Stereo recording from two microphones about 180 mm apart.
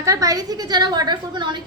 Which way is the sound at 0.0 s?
20° right (ahead or behind).